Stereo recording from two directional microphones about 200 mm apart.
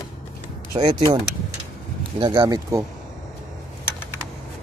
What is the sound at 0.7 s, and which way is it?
Speech, 20° right (ahead or behind).